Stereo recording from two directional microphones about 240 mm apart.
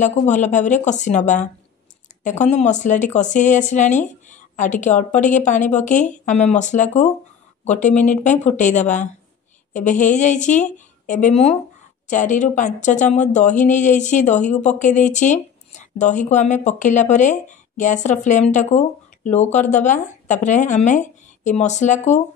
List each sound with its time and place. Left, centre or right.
0.0 s a woman's voice: left